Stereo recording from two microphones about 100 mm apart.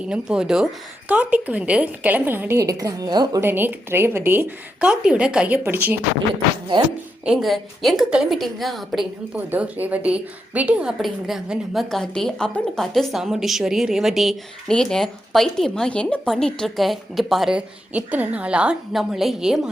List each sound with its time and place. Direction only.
0.1 s a woman's voice: 5° right (ahead or behind)
2.6 s a woman's voice: 35° right (ahead or behind)
3.4 s a woman's voice: 20° right (ahead or behind)
4.8 s a woman's voice: 10° right (ahead or behind)
7.3 s a woman's voice: 5° right (ahead or behind)
9.3 s a woman's voice: 15° right (ahead or behind); by 17.5 s centre (ahead or behind)
17.5 s a woman's voice: 15° right (ahead or behind)